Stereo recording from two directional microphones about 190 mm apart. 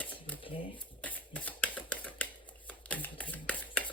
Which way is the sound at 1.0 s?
10° left (ahead or behind).